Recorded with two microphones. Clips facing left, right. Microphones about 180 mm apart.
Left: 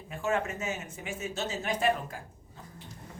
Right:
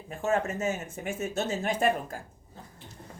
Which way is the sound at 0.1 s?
40° right (ahead or behind).